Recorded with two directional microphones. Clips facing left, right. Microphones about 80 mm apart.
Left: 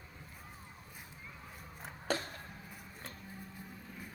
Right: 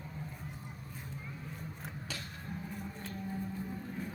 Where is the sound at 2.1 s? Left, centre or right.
Left.